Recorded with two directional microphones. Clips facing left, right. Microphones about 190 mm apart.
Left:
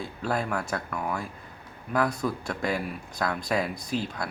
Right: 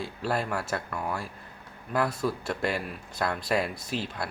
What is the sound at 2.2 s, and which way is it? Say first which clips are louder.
Speech: even; 5° right (ahead or behind).